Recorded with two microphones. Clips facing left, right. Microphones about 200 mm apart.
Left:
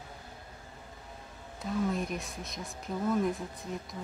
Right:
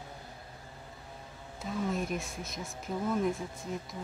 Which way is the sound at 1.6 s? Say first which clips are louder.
Left 2 dB; centre (ahead or behind).